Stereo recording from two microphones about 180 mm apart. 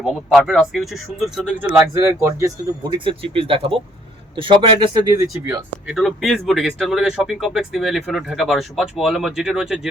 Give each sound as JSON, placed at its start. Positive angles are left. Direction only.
{"t": 0.0, "sound": "speech", "side_deg": 0}
{"t": 3.0, "sound": "speech", "side_deg": -30}
{"t": 5.9, "sound": "speech", "side_deg": 0}